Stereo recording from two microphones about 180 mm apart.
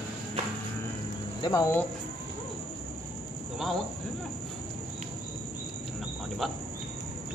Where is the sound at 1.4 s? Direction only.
20° left (ahead or behind).